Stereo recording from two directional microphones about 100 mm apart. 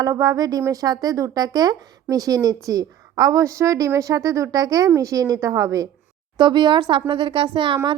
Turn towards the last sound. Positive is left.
turn(degrees=-55)  # may be behind; listen again after turning